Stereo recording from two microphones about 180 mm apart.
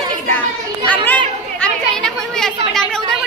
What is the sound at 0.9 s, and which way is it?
Chatter, 10° left (ahead or behind).